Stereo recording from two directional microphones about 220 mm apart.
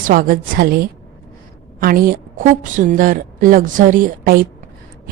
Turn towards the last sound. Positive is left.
turn(degrees=-40)  # may be behind; listen again after turning